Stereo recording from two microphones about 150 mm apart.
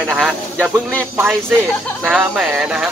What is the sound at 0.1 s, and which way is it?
Speech, 5° right (ahead or behind).